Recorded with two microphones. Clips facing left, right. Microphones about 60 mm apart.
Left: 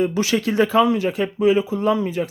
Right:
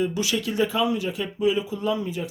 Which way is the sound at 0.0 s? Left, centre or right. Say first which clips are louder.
Left 5 dB; left.